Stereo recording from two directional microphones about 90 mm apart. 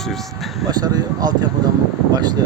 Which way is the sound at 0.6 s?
50° right (ahead or behind).